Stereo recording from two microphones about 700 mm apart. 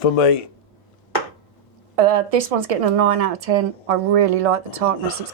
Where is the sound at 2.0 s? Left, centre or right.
Right.